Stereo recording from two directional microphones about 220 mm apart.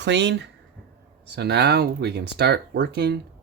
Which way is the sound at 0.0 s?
55° right (ahead or behind).